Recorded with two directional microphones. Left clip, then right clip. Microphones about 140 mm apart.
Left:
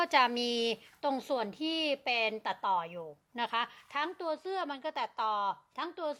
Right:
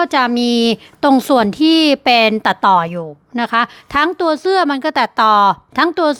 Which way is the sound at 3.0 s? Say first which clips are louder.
Right 16 dB; 35° right (ahead or behind).